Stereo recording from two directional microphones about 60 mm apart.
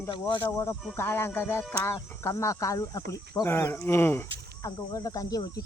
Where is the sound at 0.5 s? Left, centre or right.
Left.